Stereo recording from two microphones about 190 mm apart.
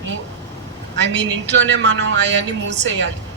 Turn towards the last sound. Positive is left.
turn(degrees=-70)  # may be behind; listen again after turning